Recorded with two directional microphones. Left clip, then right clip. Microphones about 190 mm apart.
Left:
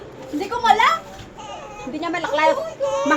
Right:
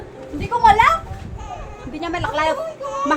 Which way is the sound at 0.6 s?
50° right (ahead or behind).